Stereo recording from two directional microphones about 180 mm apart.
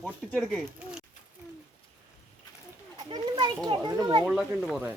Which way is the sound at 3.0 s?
25° right (ahead or behind).